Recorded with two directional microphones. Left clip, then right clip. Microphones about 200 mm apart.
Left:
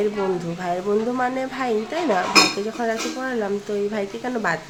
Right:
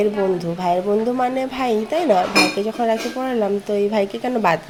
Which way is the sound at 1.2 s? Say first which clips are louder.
Right 3 dB; 15° right (ahead or behind).